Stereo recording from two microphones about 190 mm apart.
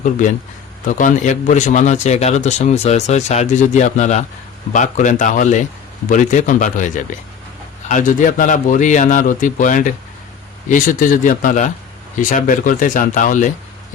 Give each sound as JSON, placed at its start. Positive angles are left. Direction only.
{"t": 0.0, "sound": "a man's voice", "side_deg": 40}